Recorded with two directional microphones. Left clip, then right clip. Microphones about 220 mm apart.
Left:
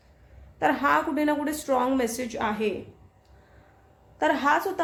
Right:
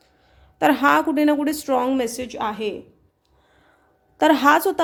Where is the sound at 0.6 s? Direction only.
45° right (ahead or behind).